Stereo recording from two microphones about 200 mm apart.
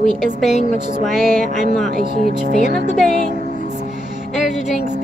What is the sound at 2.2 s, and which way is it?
Speech, 45° right (ahead or behind).